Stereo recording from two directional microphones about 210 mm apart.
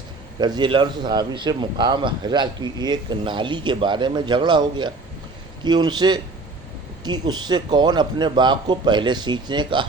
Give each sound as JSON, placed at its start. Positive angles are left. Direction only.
{"t": 0.3, "sound": "a man's voice", "side_deg": -20}